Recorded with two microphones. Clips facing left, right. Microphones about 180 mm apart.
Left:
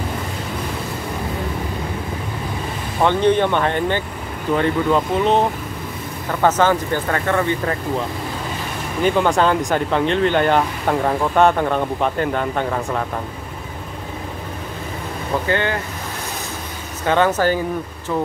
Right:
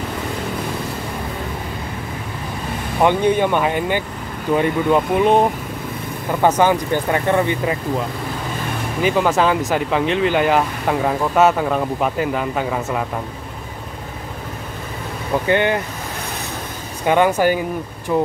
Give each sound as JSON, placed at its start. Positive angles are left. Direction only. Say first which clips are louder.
{"t": 3.0, "sound": "speech", "louder": "even", "side_deg": -10}
{"t": 9.0, "sound": "speech", "louder": "even", "side_deg": -5}
{"t": 15.4, "sound": "speech", "louder": "right 5 dB", "side_deg": -20}
{"t": 17.0, "sound": "speech", "louder": "right 2 dB", "side_deg": -15}